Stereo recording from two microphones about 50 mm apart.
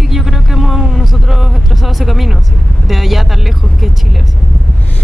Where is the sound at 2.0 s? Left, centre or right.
Centre.